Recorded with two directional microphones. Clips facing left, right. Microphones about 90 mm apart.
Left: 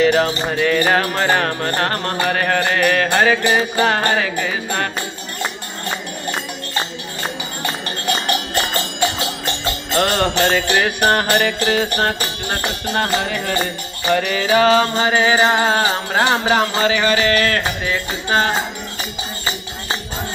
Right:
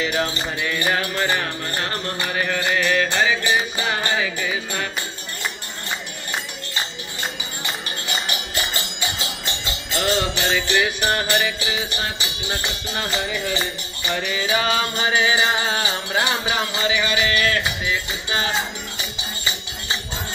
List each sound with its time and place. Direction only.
0.0 s music: 40° left (ahead or behind); by 4.8 s 55° left (ahead or behind)
6.8 s music: 55° left (ahead or behind)
9.7 s jingle bell: 55° left (ahead or behind)
10.7 s music: 55° left (ahead or behind)
14.3 s music: 40° left (ahead or behind)